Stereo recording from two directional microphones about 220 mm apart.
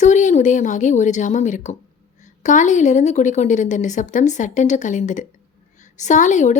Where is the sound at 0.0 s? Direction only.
35° left (ahead or behind).